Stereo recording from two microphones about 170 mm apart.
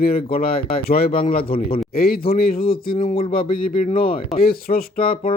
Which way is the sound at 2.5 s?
60° left (ahead or behind).